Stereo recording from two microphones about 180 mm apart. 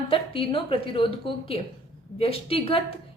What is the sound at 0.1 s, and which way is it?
A woman's voice, 30° left (ahead or behind).